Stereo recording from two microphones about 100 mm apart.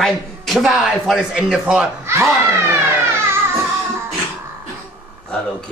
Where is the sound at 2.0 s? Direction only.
25° right (ahead or behind).